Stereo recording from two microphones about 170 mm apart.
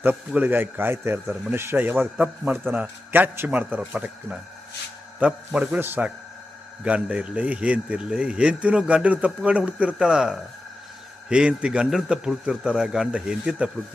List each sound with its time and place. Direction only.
0.0 s a man's voice: 10° right (ahead or behind)